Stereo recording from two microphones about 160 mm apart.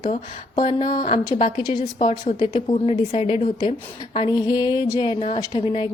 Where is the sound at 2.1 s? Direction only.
40° left (ahead or behind).